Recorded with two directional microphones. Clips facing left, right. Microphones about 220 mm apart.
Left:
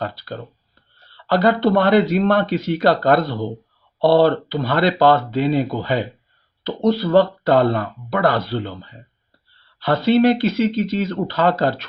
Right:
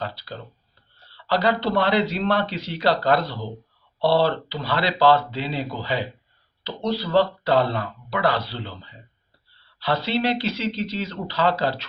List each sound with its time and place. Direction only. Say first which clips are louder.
0.0 s speech: left 5 dB; 50° left (ahead or behind)